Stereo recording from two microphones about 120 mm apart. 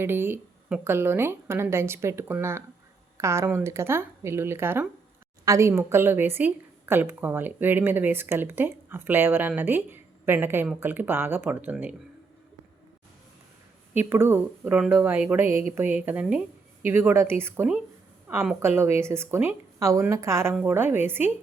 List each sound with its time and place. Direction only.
0.0 s a woman's voice: 20° right (ahead or behind)
13.9 s a woman's voice: 15° right (ahead or behind)